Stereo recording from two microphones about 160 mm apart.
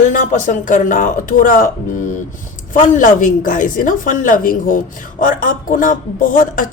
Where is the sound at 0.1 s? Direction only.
55° left (ahead or behind).